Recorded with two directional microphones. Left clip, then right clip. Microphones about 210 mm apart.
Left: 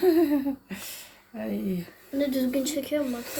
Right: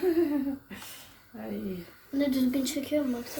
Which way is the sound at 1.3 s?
60° left (ahead or behind).